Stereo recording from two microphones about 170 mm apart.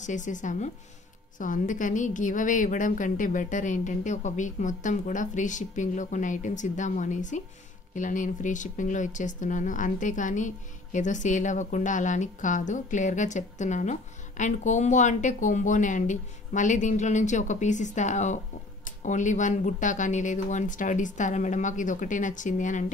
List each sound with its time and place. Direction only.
0.0 s speech: 45° left (ahead or behind)